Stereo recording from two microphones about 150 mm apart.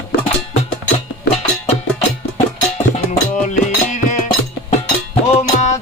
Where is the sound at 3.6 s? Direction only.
55° left (ahead or behind).